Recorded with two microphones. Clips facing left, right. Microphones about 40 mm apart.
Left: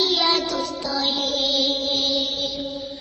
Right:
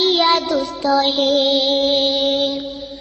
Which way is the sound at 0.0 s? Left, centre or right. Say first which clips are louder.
Right 5 dB; right.